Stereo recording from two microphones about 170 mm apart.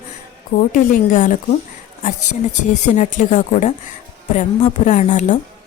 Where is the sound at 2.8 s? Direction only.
45° left (ahead or behind).